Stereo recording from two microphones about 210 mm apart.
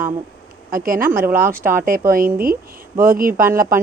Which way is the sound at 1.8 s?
40° right (ahead or behind).